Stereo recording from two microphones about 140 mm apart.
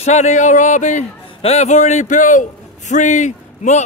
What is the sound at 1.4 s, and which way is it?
A man's voice, 50° left (ahead or behind).